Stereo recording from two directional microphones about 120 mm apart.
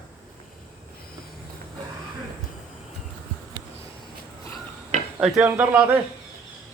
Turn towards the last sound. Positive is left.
turn(degrees=-15)  # may be behind; listen again after turning